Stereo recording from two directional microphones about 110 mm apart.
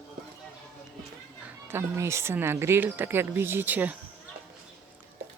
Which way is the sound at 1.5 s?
20° right (ahead or behind).